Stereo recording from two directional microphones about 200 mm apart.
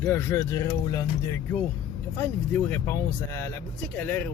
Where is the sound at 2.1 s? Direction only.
10° left (ahead or behind).